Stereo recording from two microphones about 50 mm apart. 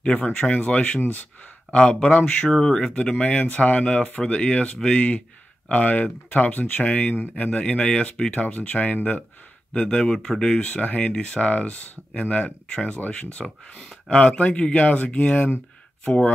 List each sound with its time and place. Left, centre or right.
0.0 s speech: left
7.6 s speech: centre
10.1 s speech: centre
10.5 s speech: left
13.7 s speech: centre
14.2 s speech: left